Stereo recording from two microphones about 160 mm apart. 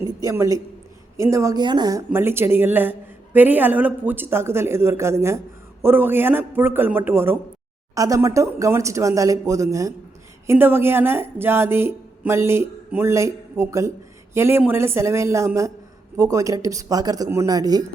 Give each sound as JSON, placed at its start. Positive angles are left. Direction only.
{"t": 0.0, "sound": "speech", "side_deg": -20}